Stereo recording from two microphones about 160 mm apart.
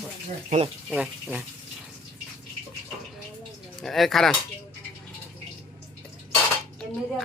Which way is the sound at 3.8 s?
Centre (ahead or behind).